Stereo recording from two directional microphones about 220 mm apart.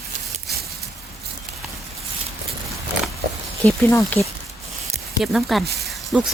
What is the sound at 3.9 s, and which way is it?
Speech, 15° left (ahead or behind).